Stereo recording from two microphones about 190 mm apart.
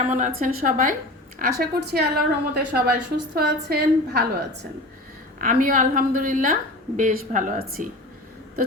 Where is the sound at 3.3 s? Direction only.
55° right (ahead or behind).